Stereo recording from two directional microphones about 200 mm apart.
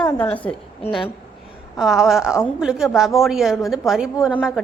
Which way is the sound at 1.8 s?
Centre (ahead or behind).